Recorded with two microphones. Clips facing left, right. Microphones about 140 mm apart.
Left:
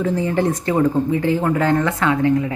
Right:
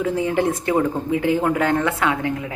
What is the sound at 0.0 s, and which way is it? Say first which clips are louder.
A woman's voice: left 1 dB; 5° right (ahead or behind).